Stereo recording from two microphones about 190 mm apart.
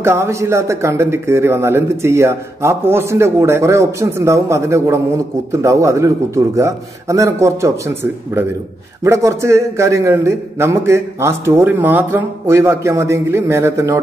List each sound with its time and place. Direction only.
0.0 s speech: 15° right (ahead or behind)